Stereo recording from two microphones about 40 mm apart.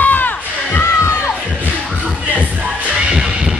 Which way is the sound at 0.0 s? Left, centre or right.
Left.